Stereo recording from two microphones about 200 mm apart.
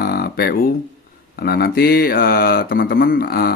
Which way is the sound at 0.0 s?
50° left (ahead or behind).